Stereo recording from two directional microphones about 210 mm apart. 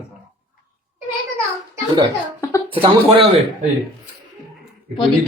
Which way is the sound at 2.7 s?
25° right (ahead or behind).